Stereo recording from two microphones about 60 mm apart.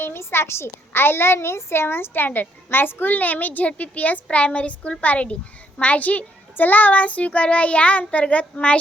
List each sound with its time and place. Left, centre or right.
0.0 s a child's voice: left